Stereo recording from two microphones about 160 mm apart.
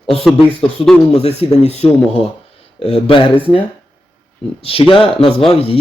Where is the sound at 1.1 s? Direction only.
40° left (ahead or behind).